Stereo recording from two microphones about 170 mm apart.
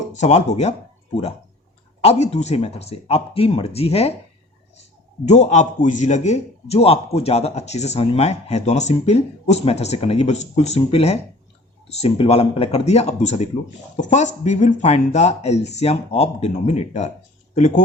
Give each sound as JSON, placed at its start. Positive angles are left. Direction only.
{"t": 0.1, "sound": "a man's voice", "side_deg": 40}
{"t": 2.0, "sound": "a man's voice", "side_deg": 40}
{"t": 5.2, "sound": "a man's voice", "side_deg": 40}